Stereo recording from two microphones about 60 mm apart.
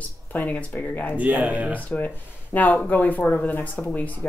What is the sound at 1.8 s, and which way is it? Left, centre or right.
Speech, left.